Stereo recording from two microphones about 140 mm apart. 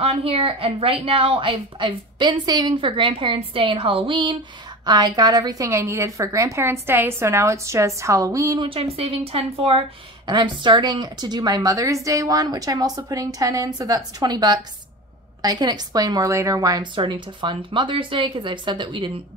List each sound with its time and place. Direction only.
0.0 s a woman's voice: 45° right (ahead or behind); by 8.6 s 25° right (ahead or behind)
8.6 s a woman's voice: 45° right (ahead or behind)